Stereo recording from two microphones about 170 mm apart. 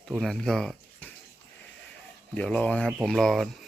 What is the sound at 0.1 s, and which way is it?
Speech, centre (ahead or behind).